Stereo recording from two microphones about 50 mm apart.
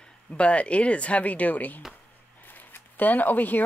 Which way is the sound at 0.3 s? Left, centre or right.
Left.